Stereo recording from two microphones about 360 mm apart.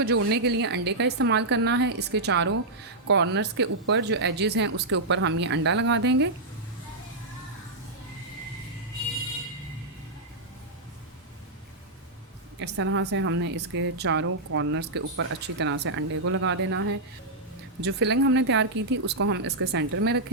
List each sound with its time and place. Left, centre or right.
0.3 s speech: right
12.5 s a woman's voice: right
17.8 s a woman's voice: right